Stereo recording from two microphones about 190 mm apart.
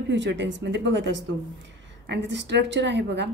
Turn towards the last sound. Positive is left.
turn(degrees=-70)  # may be behind; listen again after turning